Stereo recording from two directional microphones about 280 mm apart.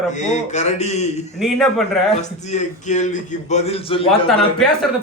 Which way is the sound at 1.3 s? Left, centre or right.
Centre.